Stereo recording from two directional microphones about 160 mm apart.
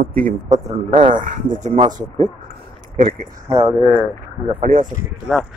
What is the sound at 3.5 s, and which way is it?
Speech, 20° right (ahead or behind).